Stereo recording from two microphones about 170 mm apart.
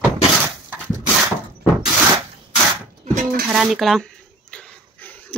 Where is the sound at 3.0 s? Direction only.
45° right (ahead or behind).